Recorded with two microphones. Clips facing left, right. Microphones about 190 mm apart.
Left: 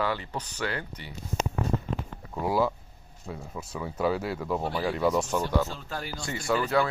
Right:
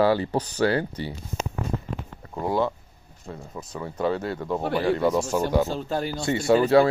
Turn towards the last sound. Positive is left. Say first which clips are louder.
# right 8 dB
turn(degrees=-30)  # may be behind; listen again after turning